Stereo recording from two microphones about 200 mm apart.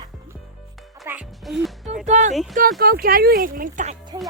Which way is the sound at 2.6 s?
45° right (ahead or behind).